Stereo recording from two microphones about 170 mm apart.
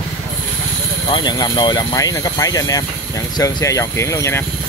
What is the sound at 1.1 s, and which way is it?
Speech, 25° left (ahead or behind).